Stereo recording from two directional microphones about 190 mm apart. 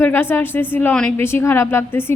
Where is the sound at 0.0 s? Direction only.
10° left (ahead or behind).